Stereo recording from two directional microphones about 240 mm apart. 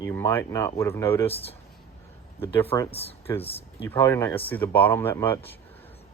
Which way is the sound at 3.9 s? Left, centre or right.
Centre.